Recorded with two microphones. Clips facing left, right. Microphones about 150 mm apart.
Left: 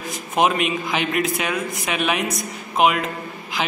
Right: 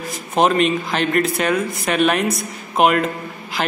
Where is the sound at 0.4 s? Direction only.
5° left (ahead or behind).